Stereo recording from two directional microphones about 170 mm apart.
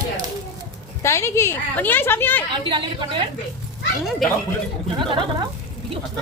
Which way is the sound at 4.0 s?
Centre (ahead or behind).